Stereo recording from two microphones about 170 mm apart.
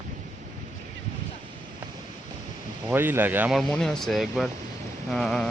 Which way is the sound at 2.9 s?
10° right (ahead or behind).